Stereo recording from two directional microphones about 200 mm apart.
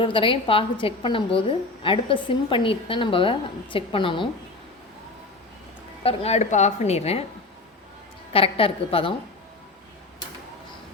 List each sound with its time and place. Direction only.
0.0 s a woman's voice: 25° left (ahead or behind)
6.0 s a woman's voice: 30° left (ahead or behind)
8.3 s a woman's voice: 30° left (ahead or behind)